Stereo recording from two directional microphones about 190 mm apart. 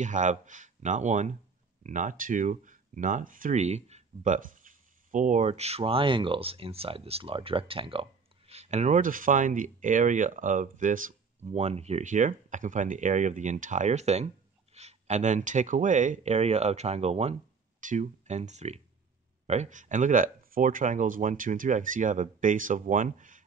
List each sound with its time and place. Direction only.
0.0 s speech: 40° right (ahead or behind)